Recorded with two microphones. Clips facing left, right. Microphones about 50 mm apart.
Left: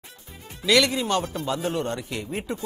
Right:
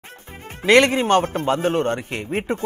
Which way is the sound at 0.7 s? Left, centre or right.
Right.